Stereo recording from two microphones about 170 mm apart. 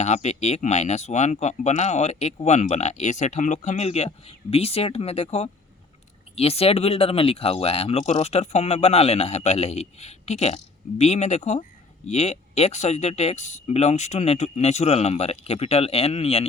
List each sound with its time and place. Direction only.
0.0 s speech: 40° left (ahead or behind)